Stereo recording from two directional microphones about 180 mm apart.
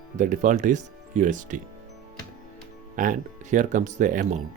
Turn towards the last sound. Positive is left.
turn(degrees=-45)  # may be behind; listen again after turning